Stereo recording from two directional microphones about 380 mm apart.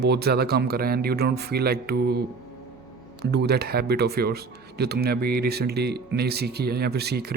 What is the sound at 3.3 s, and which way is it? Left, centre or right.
Speech, right.